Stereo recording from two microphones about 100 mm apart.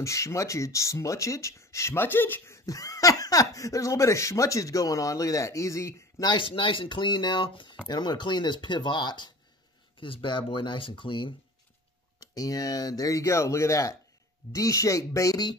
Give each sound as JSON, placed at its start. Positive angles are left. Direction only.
{"t": 0.0, "sound": "speech", "side_deg": 30}
{"t": 6.5, "sound": "speech", "side_deg": 60}
{"t": 9.9, "sound": "speech", "side_deg": 60}
{"t": 12.2, "sound": "speech", "side_deg": 35}